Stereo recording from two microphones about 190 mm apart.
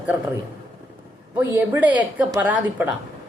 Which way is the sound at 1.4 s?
10° right (ahead or behind).